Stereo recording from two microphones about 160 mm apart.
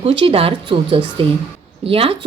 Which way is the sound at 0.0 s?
35° right (ahead or behind).